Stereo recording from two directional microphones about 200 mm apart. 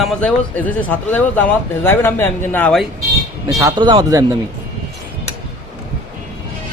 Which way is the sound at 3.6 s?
25° right (ahead or behind).